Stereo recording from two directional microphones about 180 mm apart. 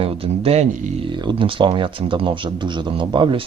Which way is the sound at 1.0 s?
25° right (ahead or behind).